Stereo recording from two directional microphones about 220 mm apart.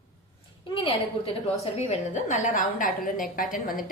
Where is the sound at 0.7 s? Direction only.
25° left (ahead or behind).